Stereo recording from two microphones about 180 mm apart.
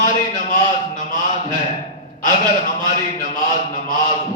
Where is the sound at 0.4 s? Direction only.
45° left (ahead or behind).